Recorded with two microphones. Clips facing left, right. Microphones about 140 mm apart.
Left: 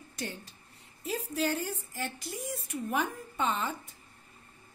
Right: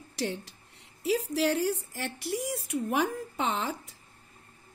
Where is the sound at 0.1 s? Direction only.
80° right.